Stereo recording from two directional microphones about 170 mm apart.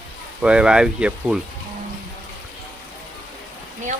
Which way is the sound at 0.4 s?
5° right (ahead or behind).